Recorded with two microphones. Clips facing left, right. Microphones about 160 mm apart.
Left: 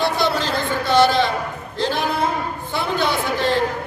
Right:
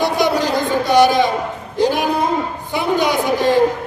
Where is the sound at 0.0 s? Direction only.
15° right (ahead or behind).